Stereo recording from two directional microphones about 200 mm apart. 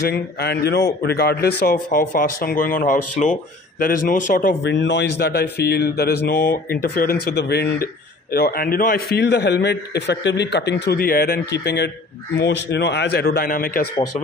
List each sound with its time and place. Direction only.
0.1 s a man's voice: 55° left (ahead or behind)